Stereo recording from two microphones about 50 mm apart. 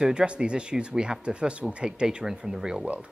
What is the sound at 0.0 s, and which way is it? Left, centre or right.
Speech, centre.